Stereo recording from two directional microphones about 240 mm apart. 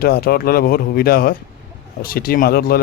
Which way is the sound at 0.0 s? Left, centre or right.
Left.